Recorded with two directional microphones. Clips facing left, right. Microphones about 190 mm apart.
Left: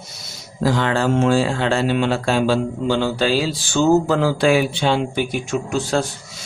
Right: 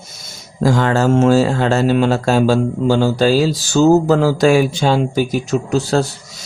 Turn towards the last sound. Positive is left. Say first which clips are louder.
# right 4 dB
turn(degrees=-40)  # may be behind; listen again after turning